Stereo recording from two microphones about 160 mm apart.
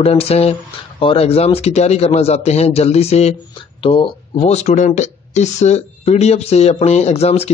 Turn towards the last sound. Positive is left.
turn(degrees=40)  # may be behind; listen again after turning